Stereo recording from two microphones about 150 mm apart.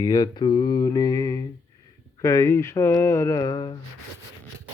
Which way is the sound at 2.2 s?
20° left (ahead or behind).